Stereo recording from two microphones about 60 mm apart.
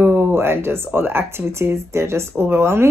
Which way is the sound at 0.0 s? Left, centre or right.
Right.